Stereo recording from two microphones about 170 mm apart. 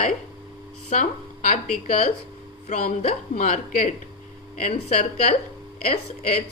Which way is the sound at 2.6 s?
40° left (ahead or behind).